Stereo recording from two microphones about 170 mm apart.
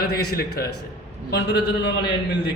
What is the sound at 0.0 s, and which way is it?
Speech, 65° left (ahead or behind).